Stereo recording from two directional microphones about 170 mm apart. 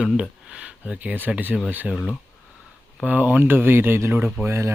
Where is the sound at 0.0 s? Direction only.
5° right (ahead or behind).